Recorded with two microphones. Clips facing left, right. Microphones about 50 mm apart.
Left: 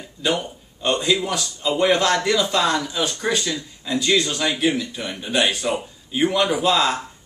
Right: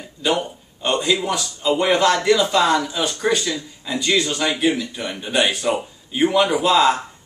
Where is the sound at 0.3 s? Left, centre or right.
Centre.